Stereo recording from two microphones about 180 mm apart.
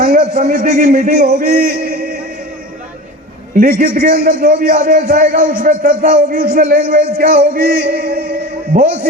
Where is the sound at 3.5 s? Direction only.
50° right (ahead or behind).